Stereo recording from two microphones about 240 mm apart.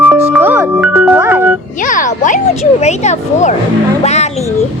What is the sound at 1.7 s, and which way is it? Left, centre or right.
Speech, left.